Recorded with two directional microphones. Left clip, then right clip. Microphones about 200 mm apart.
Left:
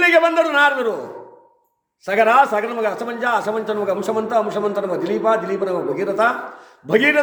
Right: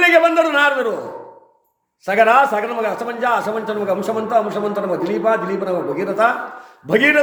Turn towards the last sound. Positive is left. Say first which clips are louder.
# right 1 dB
turn(degrees=10)  # may be behind; listen again after turning